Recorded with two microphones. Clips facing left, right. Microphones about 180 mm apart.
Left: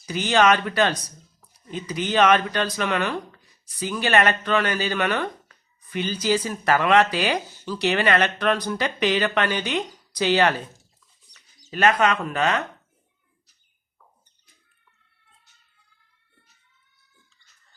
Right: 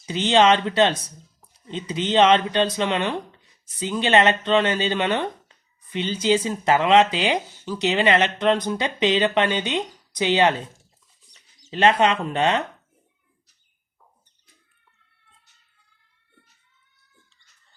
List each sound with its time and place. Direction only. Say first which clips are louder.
0.0 s speech: right 2 dB; 25° right (ahead or behind)